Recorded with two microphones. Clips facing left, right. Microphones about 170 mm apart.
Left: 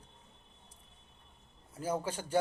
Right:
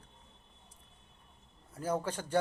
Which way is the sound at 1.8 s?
10° left (ahead or behind).